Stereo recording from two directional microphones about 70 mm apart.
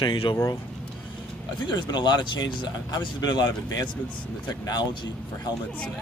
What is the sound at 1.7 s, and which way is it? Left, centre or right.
Speech, left.